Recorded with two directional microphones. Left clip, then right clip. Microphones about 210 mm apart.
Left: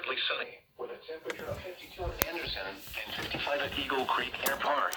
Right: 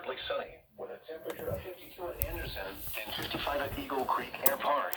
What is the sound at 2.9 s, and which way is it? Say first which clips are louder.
Speech: even; 60° right (ahead or behind).